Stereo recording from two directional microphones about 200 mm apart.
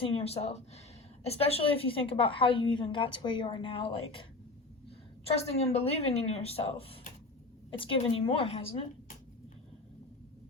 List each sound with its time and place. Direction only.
0.0 s a woman's voice: 30° left (ahead or behind)
5.4 s a woman's voice: 30° left (ahead or behind)
8.3 s a woman's voice: 30° left (ahead or behind)